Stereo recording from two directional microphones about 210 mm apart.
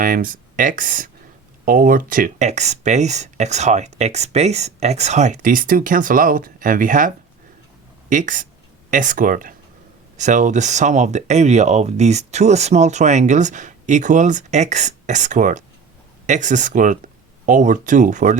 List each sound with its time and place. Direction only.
0.0 s speech: 40° right (ahead or behind)
8.1 s speech: 40° right (ahead or behind)